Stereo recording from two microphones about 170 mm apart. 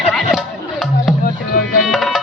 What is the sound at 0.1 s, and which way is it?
Music, centre (ahead or behind).